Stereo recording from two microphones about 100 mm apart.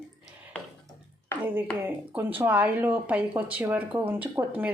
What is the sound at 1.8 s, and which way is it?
Speech, 20° right (ahead or behind).